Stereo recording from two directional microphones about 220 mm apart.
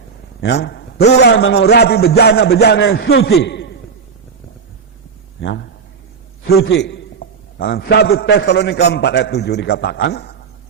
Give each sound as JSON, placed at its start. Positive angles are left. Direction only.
{"t": 0.4, "sound": "a man's voice", "side_deg": 50}
{"t": 1.4, "sound": "a man's voice", "side_deg": 65}
{"t": 1.7, "sound": "a man's voice", "side_deg": 45}
{"t": 3.3, "sound": "a man's voice", "side_deg": 50}
{"t": 5.4, "sound": "a sound", "side_deg": 55}
{"t": 6.7, "sound": "a sound", "side_deg": 50}
{"t": 8.2, "sound": "a man's voice", "side_deg": 45}